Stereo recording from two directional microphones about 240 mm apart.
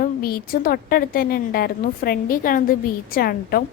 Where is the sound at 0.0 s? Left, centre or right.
Left.